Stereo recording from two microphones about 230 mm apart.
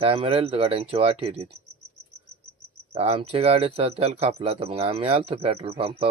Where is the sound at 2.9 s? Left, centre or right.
Right.